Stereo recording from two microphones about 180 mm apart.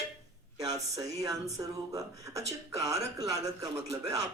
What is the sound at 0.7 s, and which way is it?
A man's voice, 20° right (ahead or behind).